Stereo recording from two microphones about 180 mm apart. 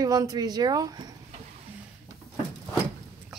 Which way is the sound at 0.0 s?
20° right (ahead or behind).